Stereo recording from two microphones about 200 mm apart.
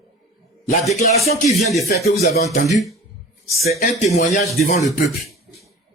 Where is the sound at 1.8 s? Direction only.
50° left (ahead or behind).